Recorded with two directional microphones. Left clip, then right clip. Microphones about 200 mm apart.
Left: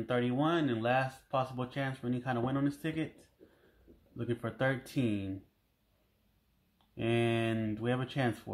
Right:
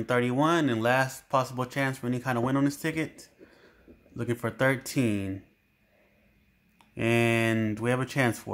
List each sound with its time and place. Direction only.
0.0 s speech: 25° right (ahead or behind)
4.2 s speech: 25° right (ahead or behind)
7.0 s speech: 20° right (ahead or behind)